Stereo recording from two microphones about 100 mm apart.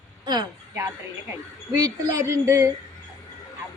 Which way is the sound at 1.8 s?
30° right (ahead or behind).